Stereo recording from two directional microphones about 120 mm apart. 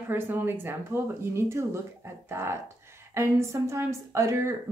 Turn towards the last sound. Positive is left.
turn(degrees=-25)  # may be behind; listen again after turning